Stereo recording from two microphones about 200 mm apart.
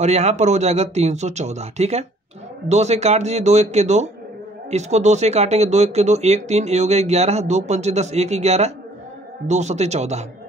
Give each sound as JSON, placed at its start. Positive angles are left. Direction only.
{"t": 0.0, "sound": "speech", "side_deg": -35}